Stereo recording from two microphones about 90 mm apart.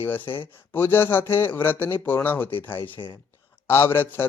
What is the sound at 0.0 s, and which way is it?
A man's voice, 25° left (ahead or behind).